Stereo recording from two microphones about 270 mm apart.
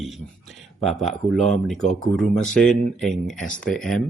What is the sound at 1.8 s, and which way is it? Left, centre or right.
Speech, left.